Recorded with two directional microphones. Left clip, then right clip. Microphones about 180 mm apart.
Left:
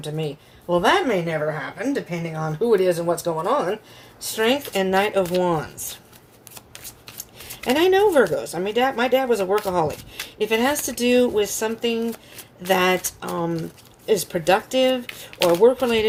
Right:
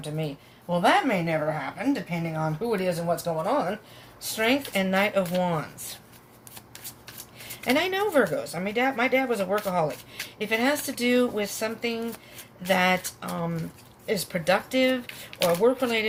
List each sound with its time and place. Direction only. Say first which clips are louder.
0.0 s speech: left 5 dB; 50° left (ahead or behind)
7.6 s speech: left 7 dB; 50° left (ahead or behind)